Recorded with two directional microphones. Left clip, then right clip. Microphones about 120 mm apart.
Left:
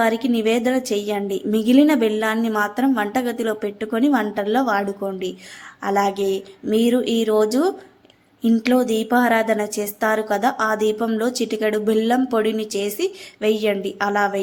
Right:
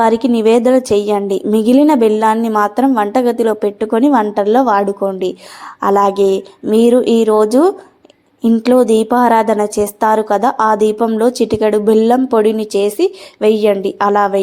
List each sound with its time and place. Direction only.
0.0 s speech: 35° right (ahead or behind)
10.9 s speech: 15° right (ahead or behind)
11.2 s speech: 30° right (ahead or behind)